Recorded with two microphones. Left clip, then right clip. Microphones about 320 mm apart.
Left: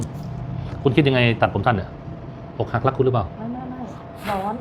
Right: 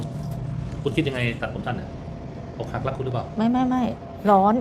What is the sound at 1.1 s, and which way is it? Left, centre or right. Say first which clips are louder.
Speech: left 9 dB; left.